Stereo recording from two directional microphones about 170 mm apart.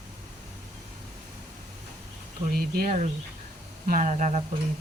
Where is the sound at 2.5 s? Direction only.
60° right (ahead or behind); by 4.4 s 45° right (ahead or behind).